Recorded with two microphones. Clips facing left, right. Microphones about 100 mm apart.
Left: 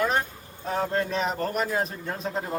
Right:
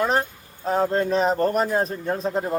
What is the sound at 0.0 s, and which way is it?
A man's voice, 35° right (ahead or behind).